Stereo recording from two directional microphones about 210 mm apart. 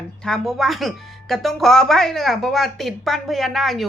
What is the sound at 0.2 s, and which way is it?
Speech, centre (ahead or behind).